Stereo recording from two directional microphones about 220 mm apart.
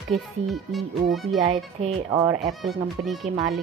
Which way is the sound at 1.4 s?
30° right (ahead or behind).